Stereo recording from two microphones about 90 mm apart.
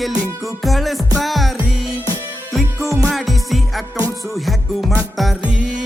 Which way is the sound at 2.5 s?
Centre (ahead or behind).